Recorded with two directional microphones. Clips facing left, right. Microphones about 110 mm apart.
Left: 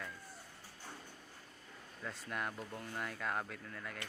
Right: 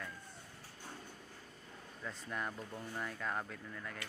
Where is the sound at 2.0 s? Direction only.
5° left (ahead or behind).